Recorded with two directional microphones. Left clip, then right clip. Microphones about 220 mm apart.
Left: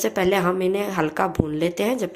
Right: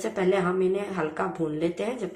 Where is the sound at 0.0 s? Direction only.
50° left (ahead or behind).